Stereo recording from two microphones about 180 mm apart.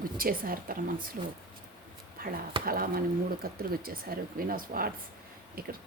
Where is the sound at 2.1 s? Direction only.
55° right (ahead or behind).